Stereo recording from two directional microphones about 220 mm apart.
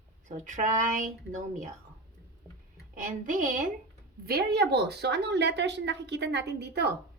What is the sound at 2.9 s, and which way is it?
A woman's voice, 35° right (ahead or behind).